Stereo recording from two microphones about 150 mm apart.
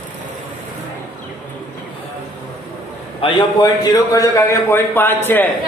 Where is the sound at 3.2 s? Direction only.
30° left (ahead or behind); by 5.5 s 15° left (ahead or behind).